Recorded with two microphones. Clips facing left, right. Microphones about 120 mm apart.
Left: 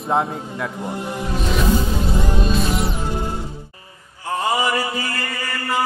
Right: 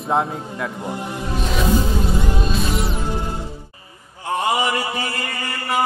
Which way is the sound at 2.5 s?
Centre (ahead or behind).